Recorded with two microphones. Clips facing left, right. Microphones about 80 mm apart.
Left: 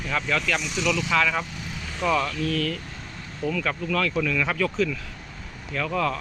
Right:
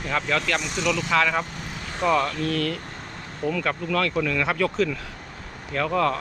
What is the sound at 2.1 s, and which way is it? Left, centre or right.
Speech, right.